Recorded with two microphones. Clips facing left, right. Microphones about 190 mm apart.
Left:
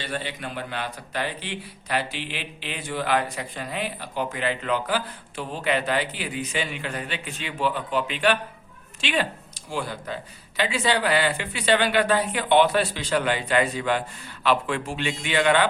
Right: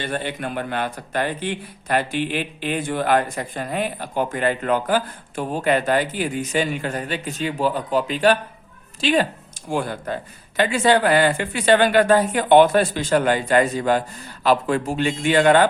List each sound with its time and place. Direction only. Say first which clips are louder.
0.0 s speech: right 5 dB; 50° right (ahead or behind)
9.6 s speech: right 6 dB; 50° right (ahead or behind)